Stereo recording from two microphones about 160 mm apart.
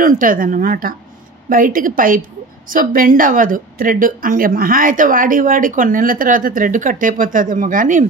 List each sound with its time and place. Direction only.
0.0 s a woman's voice: 60° right (ahead or behind)